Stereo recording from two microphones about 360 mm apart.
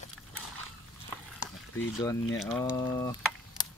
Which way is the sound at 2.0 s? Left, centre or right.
Centre.